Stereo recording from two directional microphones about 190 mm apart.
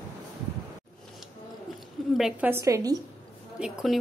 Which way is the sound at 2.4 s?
15° right (ahead or behind).